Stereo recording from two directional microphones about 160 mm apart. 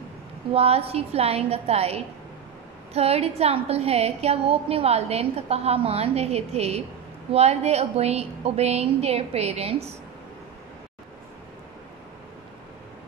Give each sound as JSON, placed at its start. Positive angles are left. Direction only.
{"t": 0.5, "sound": "a woman's voice", "side_deg": -40}